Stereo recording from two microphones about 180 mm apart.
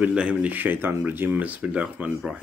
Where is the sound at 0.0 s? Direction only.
5° right (ahead or behind).